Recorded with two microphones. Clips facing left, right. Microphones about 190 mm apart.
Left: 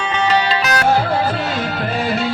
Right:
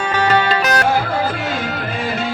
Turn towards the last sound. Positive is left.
turn(degrees=-50)  # may be behind; listen again after turning